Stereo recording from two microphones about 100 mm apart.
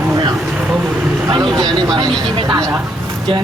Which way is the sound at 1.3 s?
45° right (ahead or behind).